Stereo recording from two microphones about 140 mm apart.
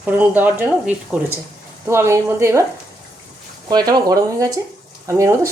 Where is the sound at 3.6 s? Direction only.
30° right (ahead or behind).